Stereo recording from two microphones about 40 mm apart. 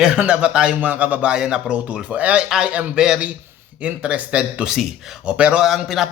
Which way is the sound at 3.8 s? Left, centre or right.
Right.